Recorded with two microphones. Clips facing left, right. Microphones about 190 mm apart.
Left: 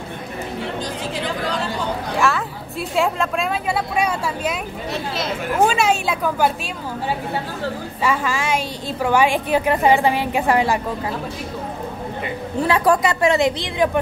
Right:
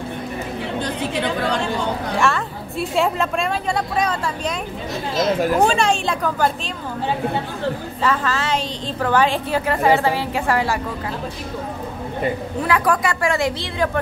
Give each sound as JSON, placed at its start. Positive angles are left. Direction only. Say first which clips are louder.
{"t": 2.1, "sound": "a woman's voice", "louder": "left 1 dB", "side_deg": 0}
{"t": 5.7, "sound": "a woman's voice", "louder": "even", "side_deg": 5}
{"t": 8.0, "sound": "a woman's voice", "louder": "even", "side_deg": 10}
{"t": 12.6, "sound": "a woman's voice", "louder": "left 3 dB", "side_deg": 25}